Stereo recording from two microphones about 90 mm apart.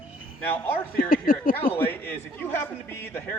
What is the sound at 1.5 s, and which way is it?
A man's voice, 25° left (ahead or behind).